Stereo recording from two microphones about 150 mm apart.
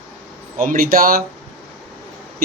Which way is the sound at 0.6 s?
70° right (ahead or behind).